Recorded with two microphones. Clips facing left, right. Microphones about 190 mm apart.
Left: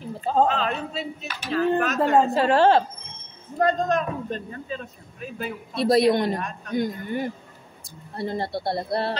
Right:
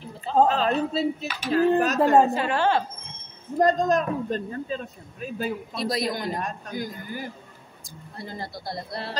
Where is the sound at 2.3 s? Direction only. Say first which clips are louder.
Left 5 dB; 30° left (ahead or behind).